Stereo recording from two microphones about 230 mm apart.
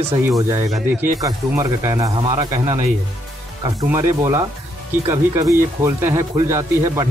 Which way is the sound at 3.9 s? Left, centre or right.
Centre.